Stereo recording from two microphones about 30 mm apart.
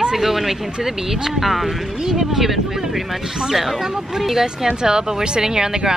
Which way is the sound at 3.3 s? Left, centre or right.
Centre.